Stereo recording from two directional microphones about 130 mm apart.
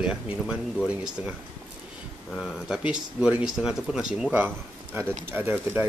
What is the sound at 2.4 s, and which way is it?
Speech, 5° right (ahead or behind).